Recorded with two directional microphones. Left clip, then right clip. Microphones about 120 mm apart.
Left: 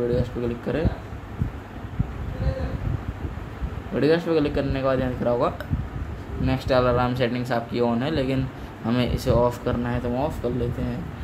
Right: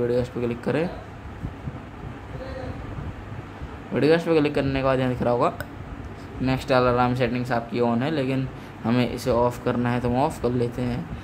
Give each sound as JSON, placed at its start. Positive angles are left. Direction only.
{"t": 0.1, "sound": "speech", "side_deg": -20}
{"t": 3.9, "sound": "a man's voice", "side_deg": -15}
{"t": 7.2, "sound": "a man's voice", "side_deg": -5}
{"t": 9.8, "sound": "speech", "side_deg": -30}
{"t": 10.1, "sound": "speech", "side_deg": -45}